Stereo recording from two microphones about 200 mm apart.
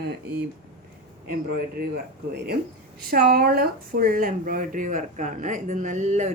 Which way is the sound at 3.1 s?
50° right (ahead or behind).